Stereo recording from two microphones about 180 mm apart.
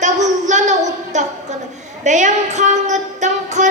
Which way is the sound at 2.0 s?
40° right (ahead or behind).